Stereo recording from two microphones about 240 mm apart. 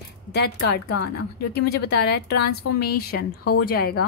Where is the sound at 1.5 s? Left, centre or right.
Left.